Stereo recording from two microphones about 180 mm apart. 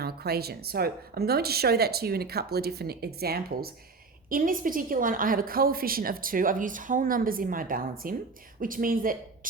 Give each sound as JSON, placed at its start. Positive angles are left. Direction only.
{"t": 0.0, "sound": "a woman's voice", "side_deg": -60}